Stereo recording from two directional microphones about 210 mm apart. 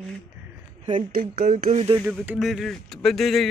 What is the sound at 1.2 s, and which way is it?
Speech, 45° right (ahead or behind).